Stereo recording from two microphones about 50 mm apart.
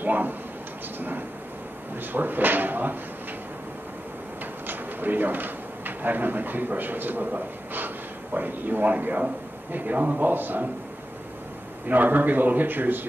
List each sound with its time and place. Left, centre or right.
0.0 s a sound: right
0.9 s a man's voice: right
4.6 s a man's voice: right
11.9 s a man's voice: right